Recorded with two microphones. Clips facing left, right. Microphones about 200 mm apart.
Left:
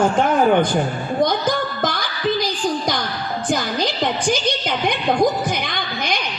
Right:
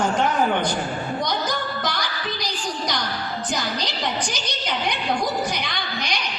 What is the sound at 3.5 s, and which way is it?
A woman's voice, 50° left (ahead or behind).